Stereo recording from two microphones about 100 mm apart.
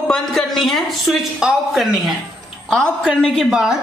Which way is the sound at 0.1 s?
Centre (ahead or behind).